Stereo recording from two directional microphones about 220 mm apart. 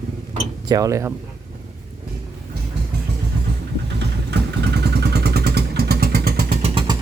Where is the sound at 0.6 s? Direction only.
15° right (ahead or behind).